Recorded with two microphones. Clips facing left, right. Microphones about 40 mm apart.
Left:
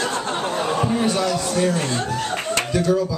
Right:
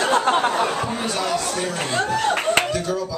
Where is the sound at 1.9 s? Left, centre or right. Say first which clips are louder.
Right 3 dB; right.